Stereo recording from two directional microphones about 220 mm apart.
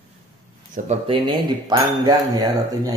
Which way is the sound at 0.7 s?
30° right (ahead or behind).